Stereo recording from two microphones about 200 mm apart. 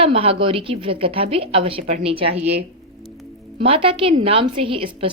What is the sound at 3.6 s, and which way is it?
Speech, 25° right (ahead or behind).